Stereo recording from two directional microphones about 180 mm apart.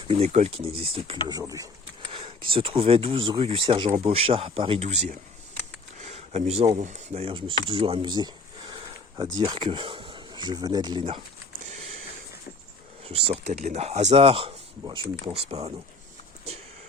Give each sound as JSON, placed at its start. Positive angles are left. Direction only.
{"t": 0.1, "sound": "speech", "side_deg": -35}
{"t": 1.3, "sound": "speech", "side_deg": -20}
{"t": 2.1, "sound": "speech", "side_deg": -30}
{"t": 8.7, "sound": "a sound", "side_deg": -25}
{"t": 9.4, "sound": "speech", "side_deg": -25}
{"t": 11.7, "sound": "a sound", "side_deg": -40}
{"t": 13.1, "sound": "speech", "side_deg": -35}